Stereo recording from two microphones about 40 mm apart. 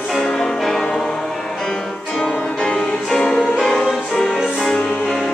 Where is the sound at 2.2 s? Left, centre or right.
Centre.